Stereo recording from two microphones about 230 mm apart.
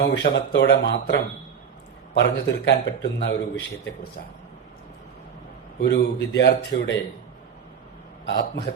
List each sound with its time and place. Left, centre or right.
0.0 s a man's voice: left
5.8 s a man's voice: left
8.3 s a man's voice: left